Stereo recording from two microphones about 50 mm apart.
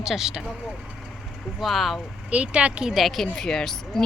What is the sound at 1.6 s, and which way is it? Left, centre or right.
Speech, centre.